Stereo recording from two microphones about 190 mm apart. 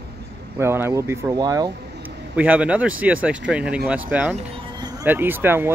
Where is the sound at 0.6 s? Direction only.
15° right (ahead or behind).